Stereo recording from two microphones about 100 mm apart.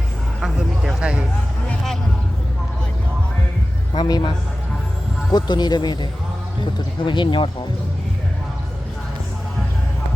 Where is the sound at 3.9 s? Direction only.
50° left (ahead or behind).